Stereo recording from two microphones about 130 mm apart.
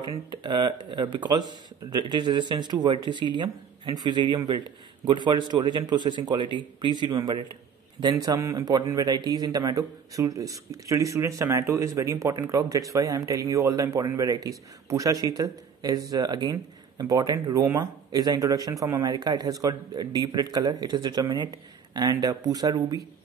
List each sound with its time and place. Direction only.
0.3 s speech: 35° right (ahead or behind)